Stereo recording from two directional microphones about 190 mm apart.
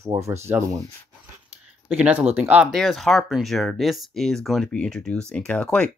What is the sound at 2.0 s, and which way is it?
Speech, 5° right (ahead or behind).